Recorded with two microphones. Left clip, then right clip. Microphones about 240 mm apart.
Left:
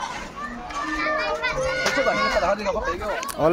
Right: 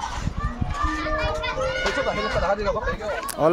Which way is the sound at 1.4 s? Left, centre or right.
Left.